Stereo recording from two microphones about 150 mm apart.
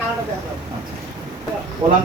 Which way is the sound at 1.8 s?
15° right (ahead or behind).